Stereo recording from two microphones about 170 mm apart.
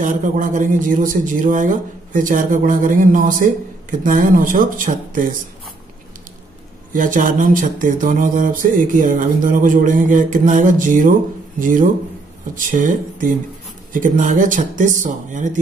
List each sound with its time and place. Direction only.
0.0 s speech: 50° right (ahead or behind)
6.9 s speech: 50° right (ahead or behind)